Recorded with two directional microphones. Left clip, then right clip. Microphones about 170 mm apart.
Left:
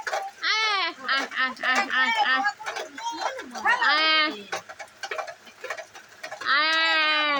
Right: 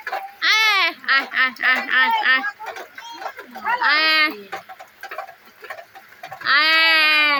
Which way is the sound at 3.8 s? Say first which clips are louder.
Right 7 dB; 15° right (ahead or behind).